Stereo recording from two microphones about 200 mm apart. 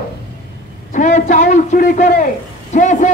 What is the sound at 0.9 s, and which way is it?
Speech, 35° left (ahead or behind).